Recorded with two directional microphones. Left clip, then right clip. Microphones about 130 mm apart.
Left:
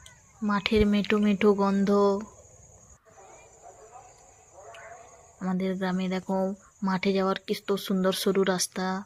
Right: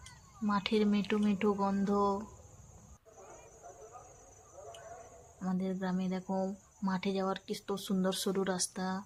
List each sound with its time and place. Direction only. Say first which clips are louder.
0.4 s speech: left 7 dB; 35° left (ahead or behind)
5.5 s speech: left 8 dB; 40° left (ahead or behind)